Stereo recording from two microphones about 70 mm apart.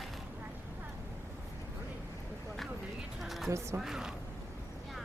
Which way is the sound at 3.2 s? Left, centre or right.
Centre.